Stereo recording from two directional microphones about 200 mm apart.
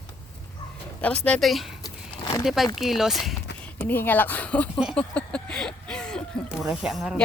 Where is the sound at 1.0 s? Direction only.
5° left (ahead or behind).